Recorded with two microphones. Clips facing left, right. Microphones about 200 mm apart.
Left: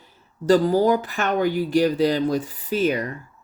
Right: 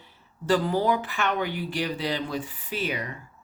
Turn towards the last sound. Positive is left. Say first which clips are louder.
# left 9 dB
turn(degrees=45)  # may be behind; listen again after turning